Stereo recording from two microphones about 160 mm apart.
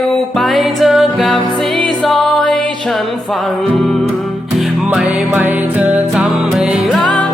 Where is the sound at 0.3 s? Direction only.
Centre (ahead or behind).